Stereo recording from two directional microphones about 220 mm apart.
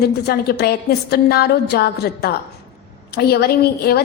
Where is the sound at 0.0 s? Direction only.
45° left (ahead or behind).